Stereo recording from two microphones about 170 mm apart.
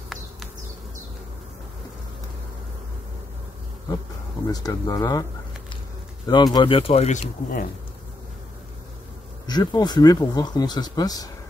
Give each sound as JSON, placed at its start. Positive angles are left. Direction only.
{"t": 4.5, "sound": "speech", "side_deg": 20}
{"t": 6.2, "sound": "speech", "side_deg": 25}
{"t": 9.5, "sound": "speech", "side_deg": 25}